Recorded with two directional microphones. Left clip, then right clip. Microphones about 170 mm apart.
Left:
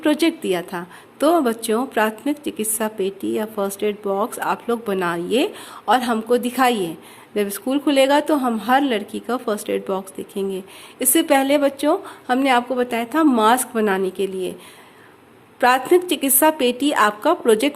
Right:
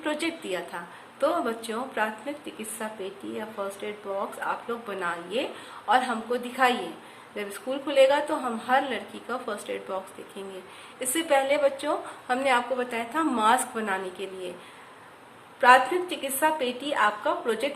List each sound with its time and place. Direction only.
0.0 s a woman's voice: 55° left (ahead or behind)
15.6 s a woman's voice: 60° left (ahead or behind)